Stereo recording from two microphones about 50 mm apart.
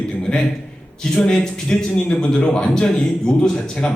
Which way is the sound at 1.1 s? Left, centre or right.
Centre.